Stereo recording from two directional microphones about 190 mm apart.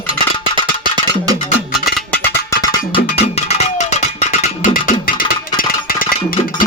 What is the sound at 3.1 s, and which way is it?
Music, 35° left (ahead or behind).